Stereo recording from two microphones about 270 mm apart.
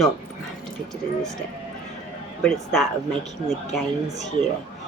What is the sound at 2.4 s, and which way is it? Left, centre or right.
A woman's voice, centre.